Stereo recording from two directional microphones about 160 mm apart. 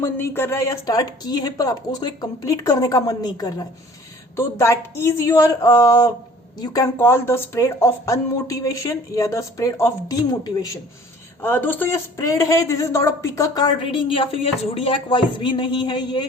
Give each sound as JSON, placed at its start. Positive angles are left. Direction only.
{"t": 0.0, "sound": "a woman's voice", "side_deg": 15}
{"t": 11.4, "sound": "a woman's voice", "side_deg": 10}